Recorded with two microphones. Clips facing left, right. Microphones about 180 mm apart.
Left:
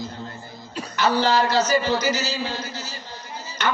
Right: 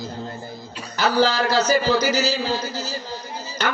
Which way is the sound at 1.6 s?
35° right (ahead or behind).